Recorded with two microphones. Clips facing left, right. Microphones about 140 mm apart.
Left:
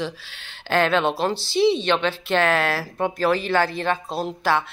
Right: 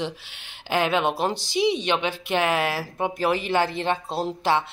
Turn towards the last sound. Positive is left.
turn(degrees=-25)  # may be behind; listen again after turning